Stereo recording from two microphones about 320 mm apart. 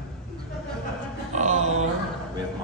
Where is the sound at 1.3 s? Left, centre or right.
Right.